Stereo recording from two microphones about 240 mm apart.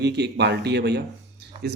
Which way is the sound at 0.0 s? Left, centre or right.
Right.